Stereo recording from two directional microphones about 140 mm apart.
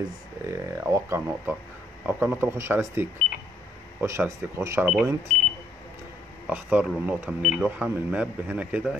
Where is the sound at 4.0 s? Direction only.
20° right (ahead or behind).